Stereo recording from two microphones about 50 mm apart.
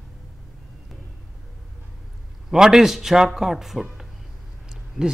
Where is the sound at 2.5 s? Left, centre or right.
Centre.